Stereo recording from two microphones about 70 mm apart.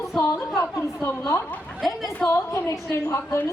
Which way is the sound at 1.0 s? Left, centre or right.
Left.